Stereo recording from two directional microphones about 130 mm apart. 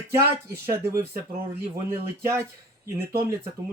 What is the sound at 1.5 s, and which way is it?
Speech, 20° right (ahead or behind).